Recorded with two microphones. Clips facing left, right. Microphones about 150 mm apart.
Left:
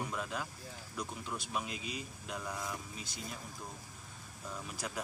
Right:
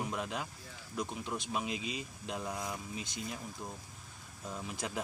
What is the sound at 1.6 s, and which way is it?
Speech, 90° right.